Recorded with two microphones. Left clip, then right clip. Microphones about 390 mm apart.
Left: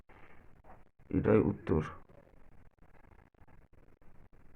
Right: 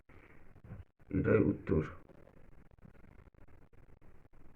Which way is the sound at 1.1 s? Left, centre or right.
Left.